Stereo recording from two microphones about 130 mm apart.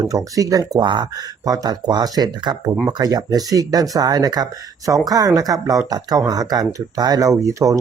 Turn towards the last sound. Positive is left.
turn(degrees=-25)  # may be behind; listen again after turning